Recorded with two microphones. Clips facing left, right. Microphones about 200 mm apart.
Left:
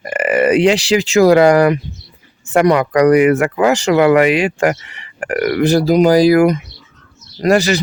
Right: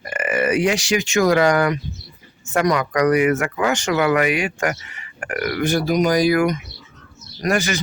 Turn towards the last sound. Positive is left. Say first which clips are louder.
# left 8 dB
turn(degrees=35)  # may be behind; listen again after turning